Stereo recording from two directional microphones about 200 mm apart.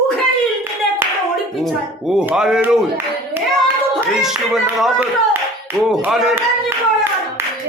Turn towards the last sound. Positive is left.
turn(degrees=0)  # may be behind; listen again after turning